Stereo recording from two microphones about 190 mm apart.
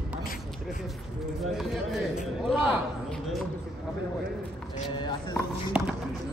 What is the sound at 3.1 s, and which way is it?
Speech, centre (ahead or behind).